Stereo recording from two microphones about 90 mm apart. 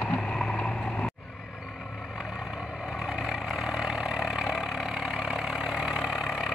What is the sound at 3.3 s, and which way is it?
Vehicle, 5° right (ahead or behind).